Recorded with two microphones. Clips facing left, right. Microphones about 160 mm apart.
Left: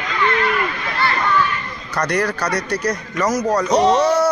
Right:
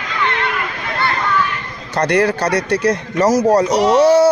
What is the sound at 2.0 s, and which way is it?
A man's voice, 30° right (ahead or behind).